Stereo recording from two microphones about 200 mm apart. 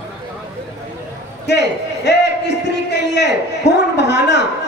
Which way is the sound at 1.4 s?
60° left (ahead or behind).